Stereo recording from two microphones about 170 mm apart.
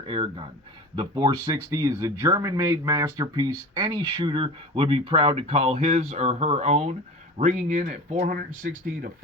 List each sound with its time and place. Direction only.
0.0 s speech: 30° right (ahead or behind)
8.2 s speech: 55° right (ahead or behind)